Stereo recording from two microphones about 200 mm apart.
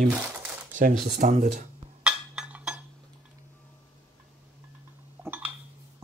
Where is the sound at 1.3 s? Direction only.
40° right (ahead or behind).